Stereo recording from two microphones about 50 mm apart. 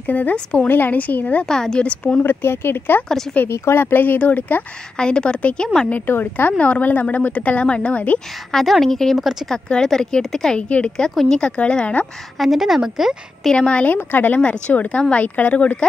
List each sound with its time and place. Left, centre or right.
0.0 s a woman's voice: left
0.7 s speech: left
1.4 s speech: centre
2.1 s speech: left
3.4 s speech: left
4.9 s a woman's voice: centre
5.9 s speech: left
6.6 s a woman's voice: left
8.5 s speech: centre
10.7 s a woman's voice: left
12.4 s a woman's voice: centre
13.5 s a woman's voice: left
13.9 s speech: left
14.4 s a woman's voice: left